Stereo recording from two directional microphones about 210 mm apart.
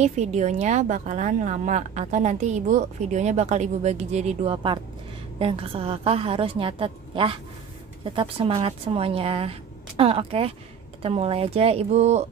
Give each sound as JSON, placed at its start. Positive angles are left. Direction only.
{"t": 0.0, "sound": "a woman's voice", "side_deg": -35}